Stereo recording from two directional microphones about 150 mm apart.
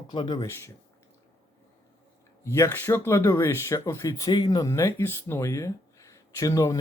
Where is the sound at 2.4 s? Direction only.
20° left (ahead or behind).